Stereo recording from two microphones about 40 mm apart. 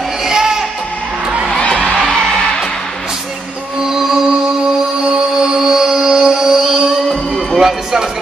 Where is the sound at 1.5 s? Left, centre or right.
Left.